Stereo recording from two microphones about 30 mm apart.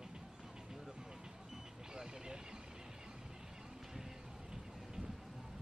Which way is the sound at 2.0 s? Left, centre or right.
Right.